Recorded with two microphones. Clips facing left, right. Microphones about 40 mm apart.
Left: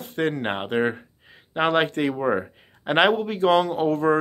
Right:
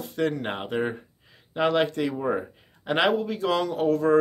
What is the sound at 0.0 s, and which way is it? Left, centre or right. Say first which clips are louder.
Speech: left 2 dB; left.